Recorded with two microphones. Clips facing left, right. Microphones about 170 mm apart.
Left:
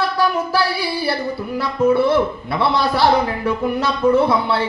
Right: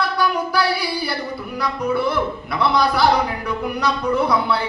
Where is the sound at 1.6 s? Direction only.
25° left (ahead or behind).